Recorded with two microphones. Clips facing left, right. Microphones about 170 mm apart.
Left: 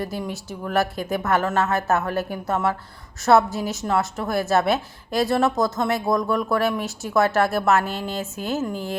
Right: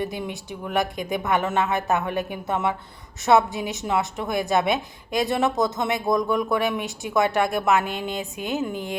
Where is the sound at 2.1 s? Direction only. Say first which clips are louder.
Left 2 dB; centre (ahead or behind).